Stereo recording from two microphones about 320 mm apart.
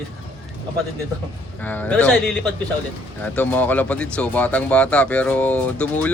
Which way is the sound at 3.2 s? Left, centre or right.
Centre.